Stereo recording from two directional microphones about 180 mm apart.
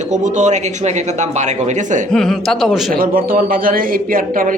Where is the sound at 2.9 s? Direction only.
55° right (ahead or behind).